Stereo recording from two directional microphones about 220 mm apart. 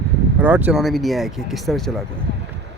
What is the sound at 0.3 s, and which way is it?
Speech, 5° right (ahead or behind).